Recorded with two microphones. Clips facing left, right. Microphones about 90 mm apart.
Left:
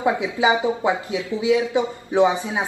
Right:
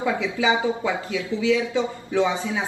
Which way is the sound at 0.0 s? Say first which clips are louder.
Left 3 dB; 25° left (ahead or behind).